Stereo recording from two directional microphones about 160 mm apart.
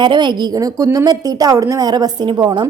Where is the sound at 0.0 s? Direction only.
30° right (ahead or behind).